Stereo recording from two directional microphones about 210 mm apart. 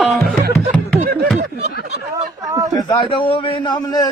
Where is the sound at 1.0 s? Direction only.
50° right (ahead or behind).